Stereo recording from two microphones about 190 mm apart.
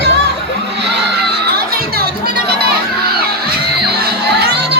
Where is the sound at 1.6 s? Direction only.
55° right (ahead or behind).